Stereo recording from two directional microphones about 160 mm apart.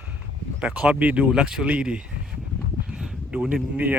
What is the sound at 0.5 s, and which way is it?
Speech, 10° right (ahead or behind).